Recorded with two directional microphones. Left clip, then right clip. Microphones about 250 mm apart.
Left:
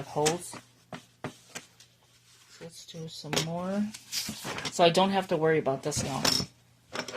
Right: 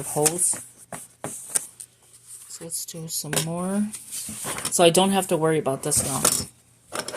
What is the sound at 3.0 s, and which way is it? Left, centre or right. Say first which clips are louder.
Speech: right 3 dB; right.